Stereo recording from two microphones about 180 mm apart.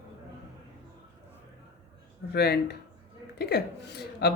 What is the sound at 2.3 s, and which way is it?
A man's voice, 60° left (ahead or behind).